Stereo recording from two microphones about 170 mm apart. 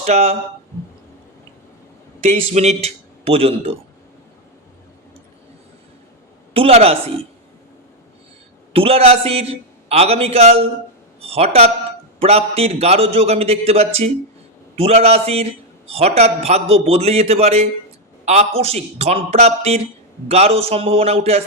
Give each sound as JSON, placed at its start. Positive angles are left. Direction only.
{"t": 0.0, "sound": "a man's voice", "side_deg": -40}
{"t": 2.3, "sound": "a man's voice", "side_deg": -40}
{"t": 6.5, "sound": "a man's voice", "side_deg": -35}
{"t": 8.7, "sound": "a man's voice", "side_deg": -35}